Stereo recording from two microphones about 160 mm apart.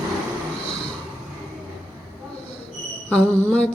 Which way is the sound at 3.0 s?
5° left (ahead or behind).